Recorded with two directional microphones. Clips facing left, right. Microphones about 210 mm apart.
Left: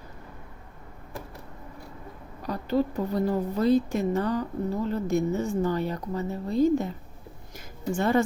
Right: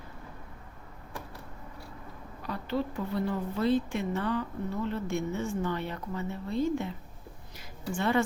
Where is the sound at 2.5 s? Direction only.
40° left (ahead or behind).